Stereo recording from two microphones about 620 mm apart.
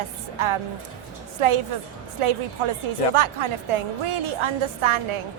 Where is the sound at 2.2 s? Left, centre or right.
Right.